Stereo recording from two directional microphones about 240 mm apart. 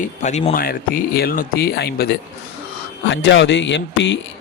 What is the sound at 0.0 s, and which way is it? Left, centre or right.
Speech, left.